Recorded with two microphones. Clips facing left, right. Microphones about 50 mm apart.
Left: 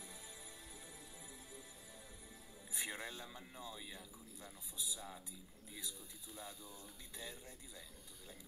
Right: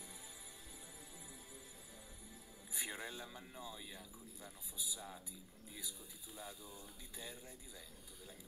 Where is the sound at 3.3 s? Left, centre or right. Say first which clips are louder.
Even; centre.